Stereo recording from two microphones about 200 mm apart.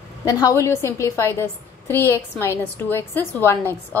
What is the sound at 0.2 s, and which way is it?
A woman's voice, 15° left (ahead or behind).